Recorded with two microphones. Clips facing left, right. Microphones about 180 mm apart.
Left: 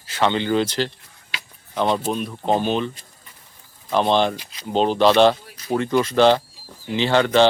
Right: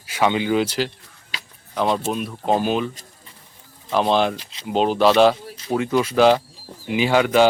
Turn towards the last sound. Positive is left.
turn(degrees=-5)  # may be behind; listen again after turning